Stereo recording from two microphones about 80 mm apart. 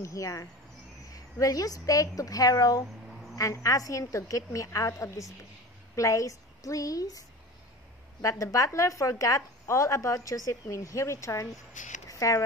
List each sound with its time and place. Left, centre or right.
0.0 s a woman's voice: left